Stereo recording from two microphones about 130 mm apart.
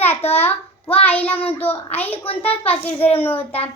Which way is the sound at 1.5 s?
15° left (ahead or behind).